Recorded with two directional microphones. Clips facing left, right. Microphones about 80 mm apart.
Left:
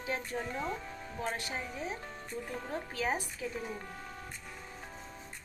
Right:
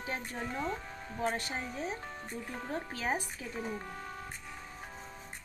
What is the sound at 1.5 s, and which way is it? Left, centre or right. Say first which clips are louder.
Speech: right 1 dB; centre.